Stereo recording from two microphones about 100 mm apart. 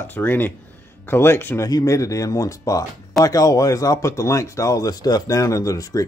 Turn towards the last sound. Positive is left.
turn(degrees=35)  # may be behind; listen again after turning